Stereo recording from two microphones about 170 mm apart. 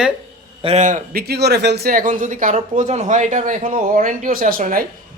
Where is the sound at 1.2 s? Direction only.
75° right (ahead or behind); by 4.8 s 55° right (ahead or behind).